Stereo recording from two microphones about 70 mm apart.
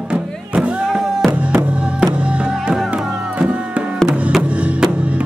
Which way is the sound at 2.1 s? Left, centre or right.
Centre.